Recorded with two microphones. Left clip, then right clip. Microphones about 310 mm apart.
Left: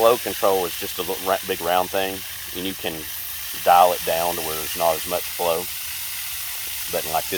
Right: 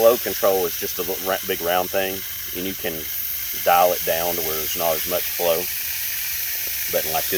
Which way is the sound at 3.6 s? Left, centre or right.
Left.